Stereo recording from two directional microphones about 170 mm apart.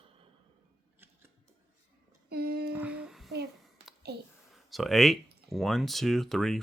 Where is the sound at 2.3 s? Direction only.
65° right (ahead or behind).